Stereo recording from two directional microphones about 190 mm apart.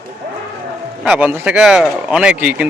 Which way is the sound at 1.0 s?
5° right (ahead or behind).